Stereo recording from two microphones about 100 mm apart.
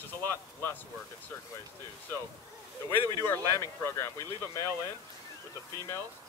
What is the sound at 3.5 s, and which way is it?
Speech, 30° left (ahead or behind).